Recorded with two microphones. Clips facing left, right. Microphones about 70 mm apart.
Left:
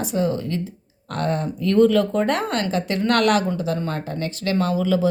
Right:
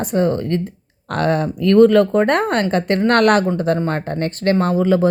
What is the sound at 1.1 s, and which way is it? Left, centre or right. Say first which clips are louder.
A woman's voice: right 6 dB; right.